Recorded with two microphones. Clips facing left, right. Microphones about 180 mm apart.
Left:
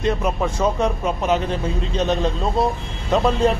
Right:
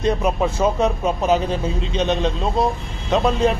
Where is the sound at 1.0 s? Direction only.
30° right (ahead or behind).